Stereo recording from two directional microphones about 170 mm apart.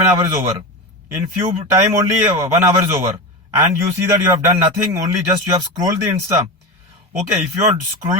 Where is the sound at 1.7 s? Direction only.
20° right (ahead or behind).